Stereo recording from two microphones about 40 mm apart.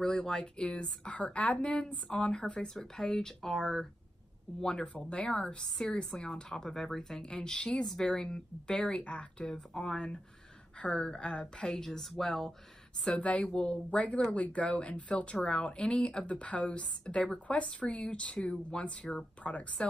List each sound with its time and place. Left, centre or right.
0.0 s a woman's voice: centre
1.1 s speech: left
2.4 s a woman's voice: centre
4.8 s a woman's voice: left
7.8 s a woman's voice: centre
8.1 s a woman's voice: left
10.8 s a woman's voice: left
11.7 s a woman's voice: centre
13.1 s speech: left
13.5 s a woman's voice: left